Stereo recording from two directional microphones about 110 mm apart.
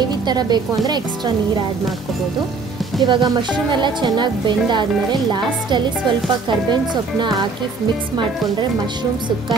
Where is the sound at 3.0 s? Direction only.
45° right (ahead or behind).